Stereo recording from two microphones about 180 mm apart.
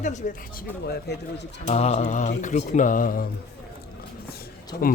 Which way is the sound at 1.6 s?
40° left (ahead or behind).